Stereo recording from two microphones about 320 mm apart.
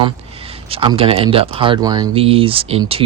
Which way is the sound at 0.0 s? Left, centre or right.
Centre.